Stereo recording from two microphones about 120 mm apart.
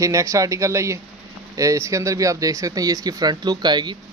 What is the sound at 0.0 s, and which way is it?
Speech, 25° right (ahead or behind).